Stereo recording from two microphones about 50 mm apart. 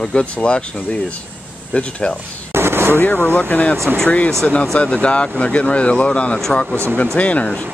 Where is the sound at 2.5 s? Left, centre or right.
Right.